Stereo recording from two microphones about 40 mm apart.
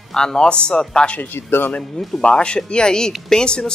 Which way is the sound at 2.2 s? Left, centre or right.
Left.